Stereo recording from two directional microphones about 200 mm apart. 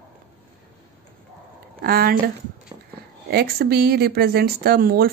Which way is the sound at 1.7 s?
50° right (ahead or behind).